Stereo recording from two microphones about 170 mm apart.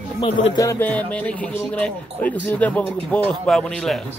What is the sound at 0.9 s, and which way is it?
Speech, 10° left (ahead or behind).